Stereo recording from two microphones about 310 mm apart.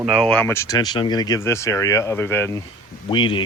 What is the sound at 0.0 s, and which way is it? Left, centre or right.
Speech, centre.